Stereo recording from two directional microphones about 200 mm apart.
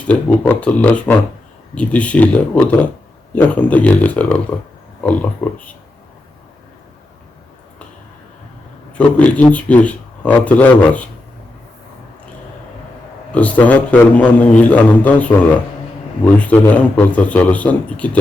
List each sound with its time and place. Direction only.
0.1 s a man's voice: 5° left (ahead or behind)
5.4 s a man's voice: 10° left (ahead or behind)
8.9 s a man's voice: 5° left (ahead or behind)
13.3 s a man's voice: 5° left (ahead or behind)